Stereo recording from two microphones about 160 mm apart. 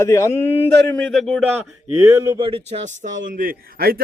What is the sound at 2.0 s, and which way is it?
Speech, 20° right (ahead or behind).